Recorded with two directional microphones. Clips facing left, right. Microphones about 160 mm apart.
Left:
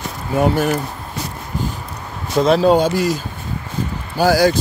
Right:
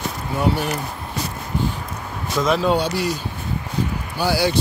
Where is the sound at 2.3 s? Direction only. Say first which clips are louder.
Left 6 dB; 35° left (ahead or behind).